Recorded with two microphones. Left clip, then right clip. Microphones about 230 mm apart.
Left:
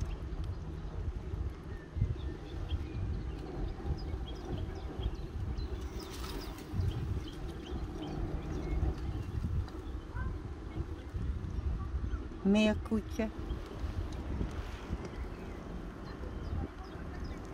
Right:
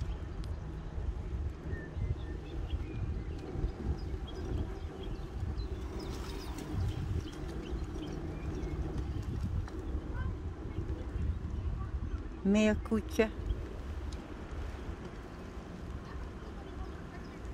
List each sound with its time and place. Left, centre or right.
12.4 s speech: centre
13.2 s speech: right